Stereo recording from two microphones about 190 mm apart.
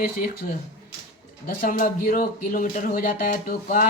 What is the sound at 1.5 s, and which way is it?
Speech, 45° left (ahead or behind).